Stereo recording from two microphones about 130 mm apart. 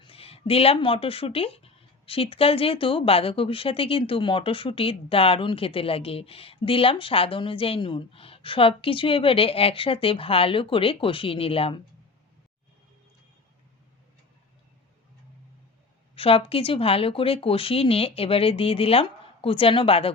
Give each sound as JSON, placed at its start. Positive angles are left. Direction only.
{"t": 0.0, "sound": "speech", "side_deg": 45}
{"t": 16.1, "sound": "speech", "side_deg": 45}